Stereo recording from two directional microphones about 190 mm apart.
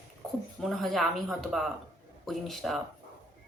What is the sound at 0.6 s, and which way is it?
Speech, centre (ahead or behind).